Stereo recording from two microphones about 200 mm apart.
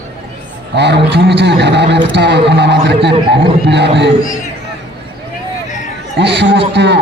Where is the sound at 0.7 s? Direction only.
60° right (ahead or behind).